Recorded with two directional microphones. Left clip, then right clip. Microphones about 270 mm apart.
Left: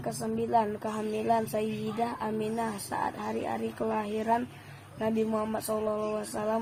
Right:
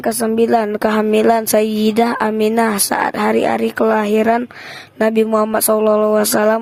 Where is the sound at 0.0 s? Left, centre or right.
Right.